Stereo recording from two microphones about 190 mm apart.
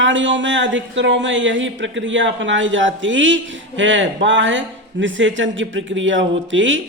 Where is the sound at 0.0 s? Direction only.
80° right.